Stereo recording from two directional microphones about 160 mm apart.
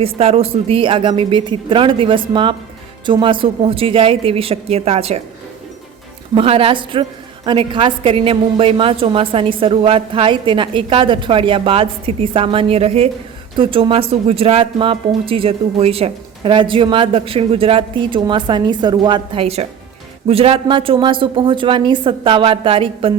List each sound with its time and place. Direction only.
0.2 s a woman's voice: 40° right (ahead or behind)
6.3 s a woman's voice: 35° right (ahead or behind)